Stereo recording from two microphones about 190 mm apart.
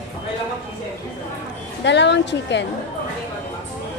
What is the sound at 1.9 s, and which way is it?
Speech, 65° left (ahead or behind).